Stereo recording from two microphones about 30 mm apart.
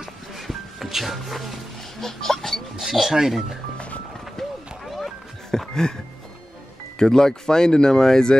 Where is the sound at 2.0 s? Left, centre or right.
Centre.